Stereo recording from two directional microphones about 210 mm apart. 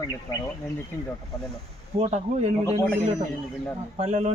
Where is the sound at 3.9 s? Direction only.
30° right (ahead or behind).